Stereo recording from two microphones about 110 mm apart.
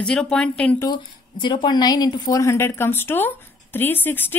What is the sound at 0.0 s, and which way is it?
Speech, 5° left (ahead or behind).